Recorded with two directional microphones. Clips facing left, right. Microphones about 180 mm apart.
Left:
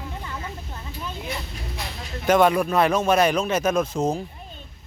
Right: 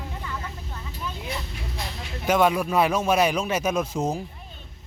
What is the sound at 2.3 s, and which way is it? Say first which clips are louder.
Speech: left 3 dB; 5° right (ahead or behind).